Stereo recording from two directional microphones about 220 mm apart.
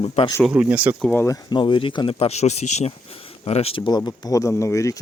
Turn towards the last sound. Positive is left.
turn(degrees=15)  # may be behind; listen again after turning